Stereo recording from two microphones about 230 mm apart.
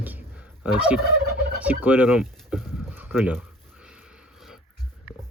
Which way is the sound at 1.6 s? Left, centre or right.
Centre.